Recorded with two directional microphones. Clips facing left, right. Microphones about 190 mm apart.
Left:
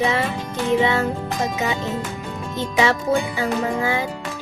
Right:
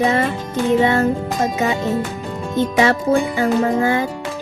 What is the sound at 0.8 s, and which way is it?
Music, 50° right (ahead or behind).